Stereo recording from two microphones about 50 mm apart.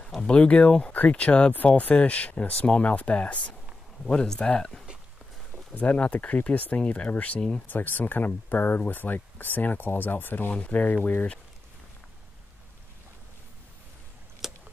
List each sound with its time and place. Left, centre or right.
0.3 s speech: left
4.0 s speech: centre
5.8 s speech: left
14.4 s a sound: centre